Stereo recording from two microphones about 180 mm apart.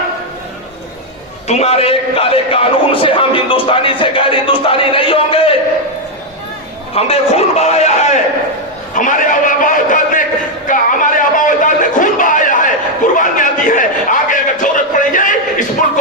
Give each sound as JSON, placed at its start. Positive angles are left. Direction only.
{"t": 1.5, "sound": "a man's voice", "side_deg": 35}
{"t": 6.9, "sound": "a man's voice", "side_deg": 35}
{"t": 10.7, "sound": "a sound", "side_deg": 45}